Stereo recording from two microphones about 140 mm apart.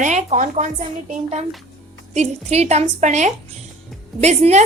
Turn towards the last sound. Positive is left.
turn(degrees=-55)  # may be behind; listen again after turning